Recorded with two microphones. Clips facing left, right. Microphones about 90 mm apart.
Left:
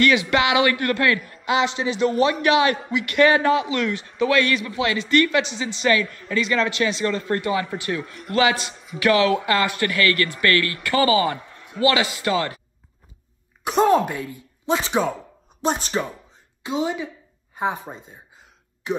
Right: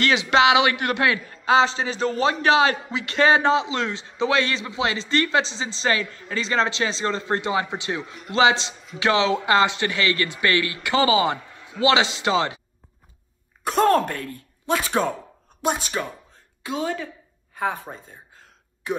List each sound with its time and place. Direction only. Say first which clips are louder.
0.0 s a man's voice: right 1 dB; 25° right (ahead or behind)
13.7 s speech: left 1 dB; 10° left (ahead or behind)
17.9 s gasp: even; 15° left (ahead or behind)